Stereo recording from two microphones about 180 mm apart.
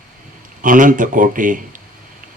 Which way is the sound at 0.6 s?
45° right (ahead or behind).